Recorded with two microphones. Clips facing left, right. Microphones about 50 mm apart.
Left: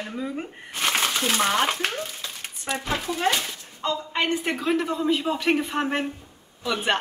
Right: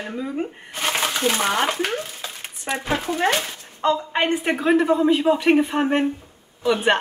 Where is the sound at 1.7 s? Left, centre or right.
Right.